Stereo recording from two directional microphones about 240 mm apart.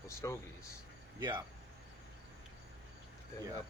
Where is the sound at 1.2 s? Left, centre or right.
Centre.